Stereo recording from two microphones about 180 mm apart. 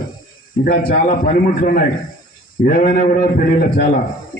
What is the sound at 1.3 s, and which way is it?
A man's voice, 50° left (ahead or behind).